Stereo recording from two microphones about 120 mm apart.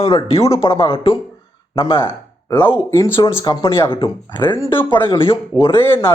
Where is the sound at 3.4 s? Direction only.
35° left (ahead or behind).